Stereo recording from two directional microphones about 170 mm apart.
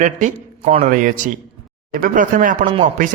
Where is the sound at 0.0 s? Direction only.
45° right (ahead or behind).